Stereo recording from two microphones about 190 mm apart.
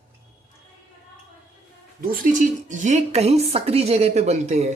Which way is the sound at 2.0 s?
45° right (ahead or behind).